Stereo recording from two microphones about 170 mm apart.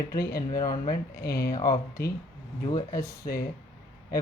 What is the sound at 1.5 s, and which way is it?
Speech, 25° left (ahead or behind).